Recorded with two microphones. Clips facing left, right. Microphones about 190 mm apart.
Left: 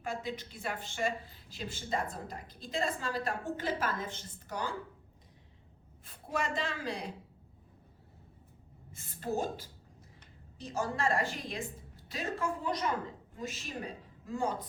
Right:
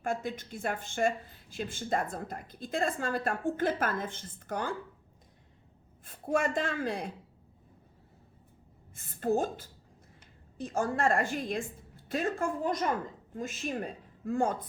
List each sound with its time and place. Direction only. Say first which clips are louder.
0.0 s speech: right 4 dB; 50° right (ahead or behind)
6.2 s speech: right 6 dB; 50° right (ahead or behind)
8.9 s a woman's voice: right 7 dB; 50° right (ahead or behind)